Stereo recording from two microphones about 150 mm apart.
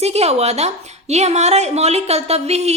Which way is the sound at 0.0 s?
45° right (ahead or behind).